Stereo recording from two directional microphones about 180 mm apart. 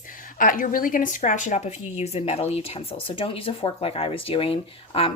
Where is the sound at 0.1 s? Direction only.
50° left (ahead or behind).